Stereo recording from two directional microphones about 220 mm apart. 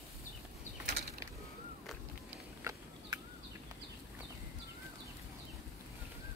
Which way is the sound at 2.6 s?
15° right (ahead or behind).